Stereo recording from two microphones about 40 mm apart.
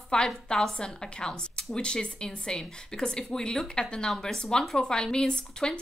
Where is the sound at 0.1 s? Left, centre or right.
Left.